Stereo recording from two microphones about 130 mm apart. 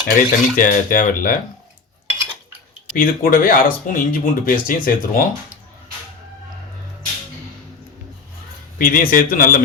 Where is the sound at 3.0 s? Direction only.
90° left.